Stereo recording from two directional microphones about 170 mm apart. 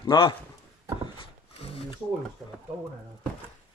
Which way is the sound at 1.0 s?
35° left (ahead or behind).